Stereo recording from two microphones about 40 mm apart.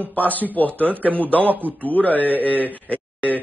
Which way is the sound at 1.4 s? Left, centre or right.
Right.